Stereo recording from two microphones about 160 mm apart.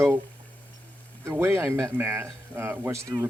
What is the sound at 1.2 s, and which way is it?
Speech, 15° right (ahead or behind).